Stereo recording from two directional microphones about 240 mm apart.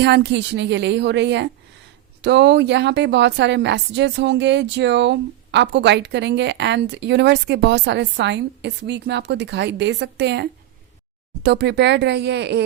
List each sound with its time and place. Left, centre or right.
0.0 s a woman's voice: right